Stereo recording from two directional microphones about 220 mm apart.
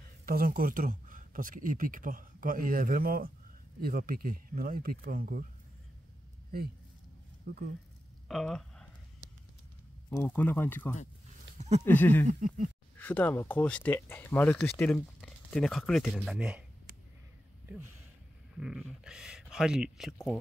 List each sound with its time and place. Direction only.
0.2 s speech: 40° right (ahead or behind)
7.4 s speech: 45° right (ahead or behind)
8.3 s speech: centre (ahead or behind)
10.0 s speech: 10° left (ahead or behind)
11.5 s a sound: 60° right (ahead or behind)
11.8 s speech: 10° left (ahead or behind)
12.3 s speech: 35° right (ahead or behind)
12.9 s speech: 10° left (ahead or behind)
18.6 s speech: centre (ahead or behind)